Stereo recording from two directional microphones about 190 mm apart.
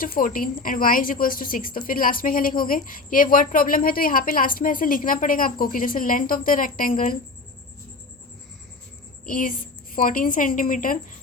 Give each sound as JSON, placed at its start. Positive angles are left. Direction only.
{"t": 0.0, "sound": "a woman's voice", "side_deg": 45}
{"t": 9.2, "sound": "a woman's voice", "side_deg": 45}